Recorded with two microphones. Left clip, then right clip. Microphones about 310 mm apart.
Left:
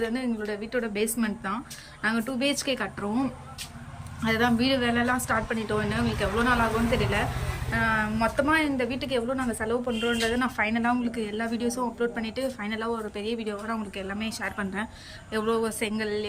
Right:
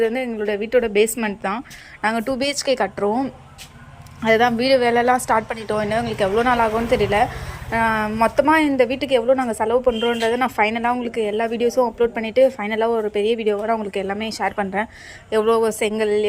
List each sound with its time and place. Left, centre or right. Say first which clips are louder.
0.0 s a woman's voice: right 9 dB; centre
4.2 s a woman's voice: right 9 dB; centre